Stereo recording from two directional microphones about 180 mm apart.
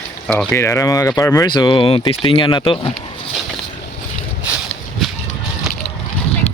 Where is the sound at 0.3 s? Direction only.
10° left (ahead or behind); by 2.9 s 25° left (ahead or behind).